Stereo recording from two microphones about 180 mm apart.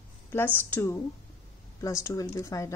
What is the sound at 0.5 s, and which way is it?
A woman's voice, 10° left (ahead or behind).